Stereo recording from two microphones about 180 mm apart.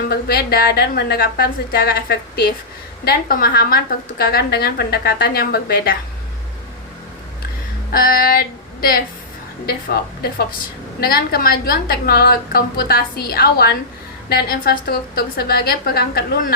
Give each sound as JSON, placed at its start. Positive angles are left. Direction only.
{"t": 0.1, "sound": "a woman's voice", "side_deg": 55}
{"t": 7.9, "sound": "female singing", "side_deg": 55}
{"t": 11.0, "sound": "a woman's voice", "side_deg": 55}